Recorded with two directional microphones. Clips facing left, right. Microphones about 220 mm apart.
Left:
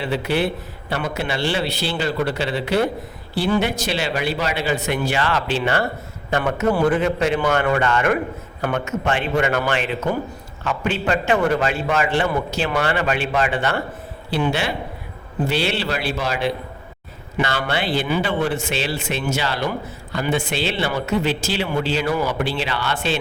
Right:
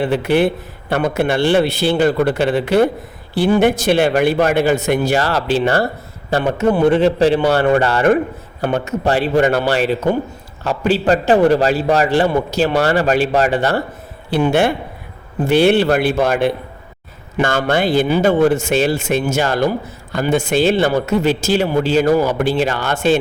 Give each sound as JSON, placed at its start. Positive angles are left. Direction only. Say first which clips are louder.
{"t": 0.0, "sound": "speech", "louder": "right 7 dB", "side_deg": -50}
{"t": 6.3, "sound": "a man's voice", "louder": "right 4 dB", "side_deg": -25}
{"t": 14.3, "sound": "speech", "louder": "right 7 dB", "side_deg": -50}